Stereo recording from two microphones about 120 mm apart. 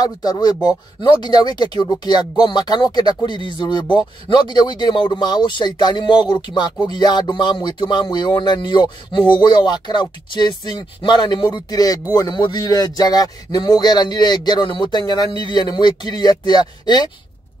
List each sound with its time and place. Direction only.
0.0 s speech: 35° left (ahead or behind)